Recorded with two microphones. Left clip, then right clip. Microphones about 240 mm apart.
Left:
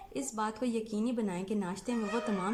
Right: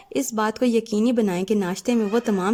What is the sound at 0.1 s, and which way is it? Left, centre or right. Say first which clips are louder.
A woman's voice: right 12 dB; right.